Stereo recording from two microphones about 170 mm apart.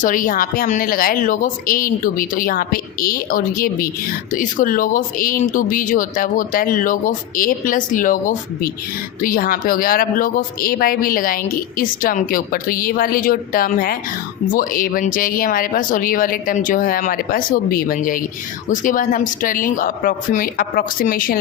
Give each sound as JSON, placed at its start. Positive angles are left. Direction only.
{"t": 0.0, "sound": "speech", "side_deg": 50}